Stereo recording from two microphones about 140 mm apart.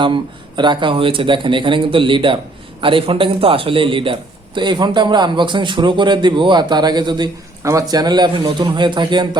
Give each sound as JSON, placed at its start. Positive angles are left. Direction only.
{"t": 0.0, "sound": "a man's voice", "side_deg": -35}